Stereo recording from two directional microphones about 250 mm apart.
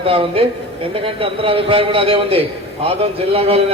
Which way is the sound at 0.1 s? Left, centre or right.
Right.